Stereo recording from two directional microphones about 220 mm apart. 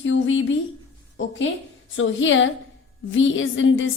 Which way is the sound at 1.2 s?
60° left (ahead or behind).